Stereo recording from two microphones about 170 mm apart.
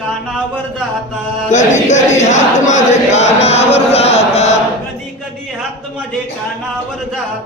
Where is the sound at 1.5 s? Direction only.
45° left (ahead or behind).